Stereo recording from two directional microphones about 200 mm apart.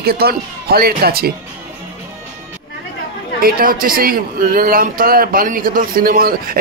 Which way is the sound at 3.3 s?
45° right (ahead or behind).